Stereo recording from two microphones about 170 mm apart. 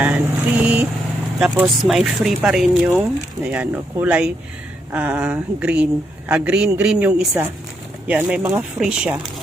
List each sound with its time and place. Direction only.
0.0 s vehicle: 10° right (ahead or behind)
1.4 s a woman's voice: 5° right (ahead or behind)